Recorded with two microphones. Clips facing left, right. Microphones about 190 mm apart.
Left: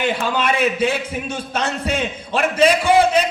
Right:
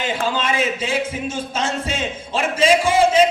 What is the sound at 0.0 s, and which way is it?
A man's voice, 65° left (ahead or behind).